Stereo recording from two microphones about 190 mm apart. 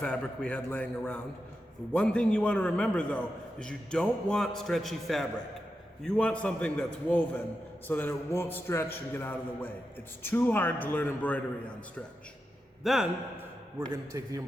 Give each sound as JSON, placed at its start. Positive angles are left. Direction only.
{"t": 0.0, "sound": "a man's voice", "side_deg": 5}
{"t": 12.8, "sound": "a man's voice", "side_deg": 0}
{"t": 13.9, "sound": "a man's voice", "side_deg": -15}